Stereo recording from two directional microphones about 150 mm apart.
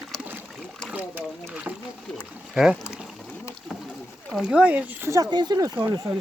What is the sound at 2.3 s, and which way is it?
Boat, 5° right (ahead or behind).